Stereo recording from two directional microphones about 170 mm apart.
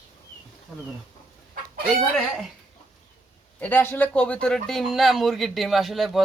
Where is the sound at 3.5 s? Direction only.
10° left (ahead or behind).